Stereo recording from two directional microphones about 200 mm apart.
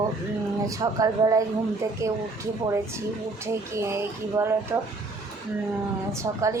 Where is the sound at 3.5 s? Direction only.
15° right (ahead or behind).